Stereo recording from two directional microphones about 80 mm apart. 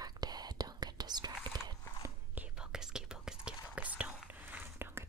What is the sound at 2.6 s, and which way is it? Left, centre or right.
Whispering, centre.